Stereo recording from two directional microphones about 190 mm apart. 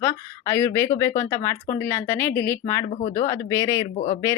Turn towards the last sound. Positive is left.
turn(degrees=40)  # may be behind; listen again after turning